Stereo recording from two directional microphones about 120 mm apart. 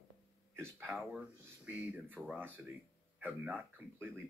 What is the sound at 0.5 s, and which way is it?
Speech, 20° right (ahead or behind).